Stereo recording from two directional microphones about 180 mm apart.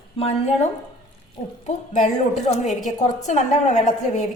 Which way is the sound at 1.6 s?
40° left (ahead or behind).